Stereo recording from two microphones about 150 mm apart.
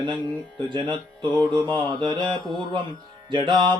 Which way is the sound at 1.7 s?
30° right (ahead or behind).